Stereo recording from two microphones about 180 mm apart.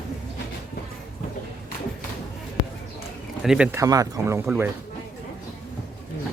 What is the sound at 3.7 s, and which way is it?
Speech, 20° right (ahead or behind).